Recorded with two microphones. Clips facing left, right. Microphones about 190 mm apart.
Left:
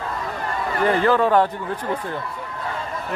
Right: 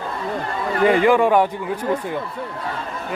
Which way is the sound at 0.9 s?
10° right (ahead or behind).